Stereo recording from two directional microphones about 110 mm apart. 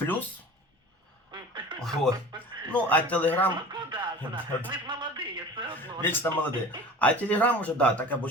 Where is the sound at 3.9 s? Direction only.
45° right (ahead or behind).